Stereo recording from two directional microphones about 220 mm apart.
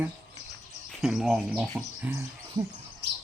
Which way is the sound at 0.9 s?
Centre (ahead or behind).